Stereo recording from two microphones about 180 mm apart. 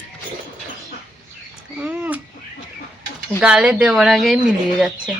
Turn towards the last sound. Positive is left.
turn(degrees=-5)  # may be behind; listen again after turning